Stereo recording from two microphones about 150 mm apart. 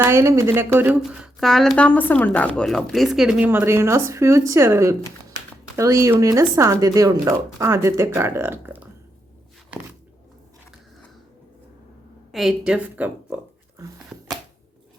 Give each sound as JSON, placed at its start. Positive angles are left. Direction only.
{"t": 0.0, "sound": "a woman's voice", "side_deg": -15}
{"t": 1.4, "sound": "speech", "side_deg": 0}
{"t": 9.7, "sound": "a sound", "side_deg": -10}
{"t": 12.3, "sound": "speech", "side_deg": 0}